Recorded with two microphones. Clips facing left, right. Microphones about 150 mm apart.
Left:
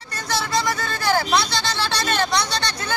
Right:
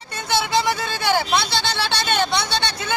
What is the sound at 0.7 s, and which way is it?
Speech, 5° right (ahead or behind).